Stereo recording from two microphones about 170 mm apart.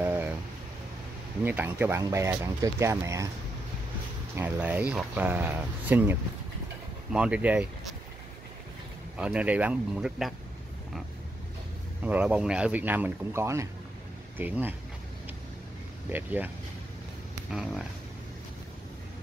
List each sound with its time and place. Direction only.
0.0 s a sound: 10° right (ahead or behind)
1.4 s speech: 10° right (ahead or behind)
4.4 s speech: 10° right (ahead or behind)
9.2 s speech: 5° right (ahead or behind)
12.0 s speech: 10° right (ahead or behind)
16.1 s speech: 10° right (ahead or behind)
17.5 s speech: 5° right (ahead or behind)